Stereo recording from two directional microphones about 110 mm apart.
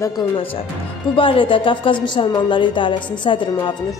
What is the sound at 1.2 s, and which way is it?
A woman's voice, 50° left (ahead or behind).